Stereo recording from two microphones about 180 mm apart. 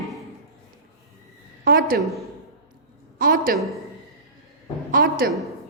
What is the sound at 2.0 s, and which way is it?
Speech, centre (ahead or behind).